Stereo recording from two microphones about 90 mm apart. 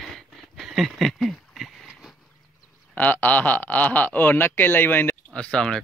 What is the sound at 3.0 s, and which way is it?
Speech, 20° left (ahead or behind).